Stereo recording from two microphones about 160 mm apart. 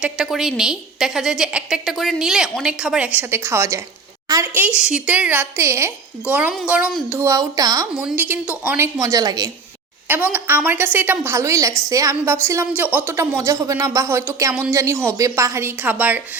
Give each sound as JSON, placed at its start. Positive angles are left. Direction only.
{"t": 0.0, "sound": "a woman's voice", "side_deg": -5}
{"t": 7.3, "sound": "speech", "side_deg": -20}
{"t": 7.9, "sound": "a woman's voice", "side_deg": -10}
{"t": 10.1, "sound": "a woman's voice", "side_deg": -10}